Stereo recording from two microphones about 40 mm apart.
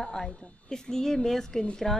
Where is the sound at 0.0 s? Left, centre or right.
Centre.